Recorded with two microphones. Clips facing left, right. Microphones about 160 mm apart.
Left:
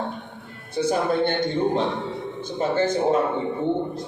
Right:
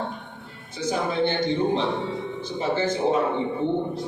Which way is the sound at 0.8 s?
55° left (ahead or behind).